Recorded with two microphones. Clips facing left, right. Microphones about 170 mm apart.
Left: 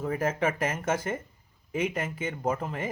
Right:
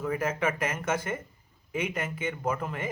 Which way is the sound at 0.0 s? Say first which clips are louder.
Left 1 dB; 35° left (ahead or behind).